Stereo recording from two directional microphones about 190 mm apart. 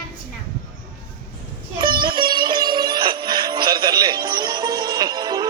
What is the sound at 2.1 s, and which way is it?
Music, 25° right (ahead or behind).